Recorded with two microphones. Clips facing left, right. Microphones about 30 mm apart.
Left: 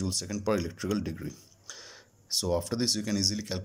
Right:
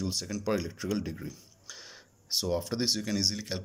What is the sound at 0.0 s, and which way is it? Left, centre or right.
Speech, centre.